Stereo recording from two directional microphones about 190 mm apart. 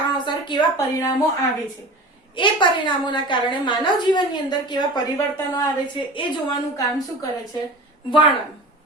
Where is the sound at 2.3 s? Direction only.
25° left (ahead or behind).